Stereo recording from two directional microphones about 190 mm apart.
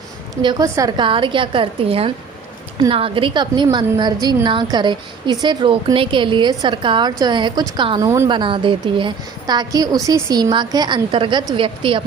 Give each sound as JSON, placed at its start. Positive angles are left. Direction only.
{"t": 0.4, "sound": "a woman's voice", "side_deg": -20}